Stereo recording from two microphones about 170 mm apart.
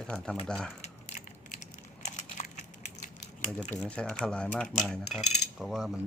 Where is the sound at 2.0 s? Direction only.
45° left (ahead or behind).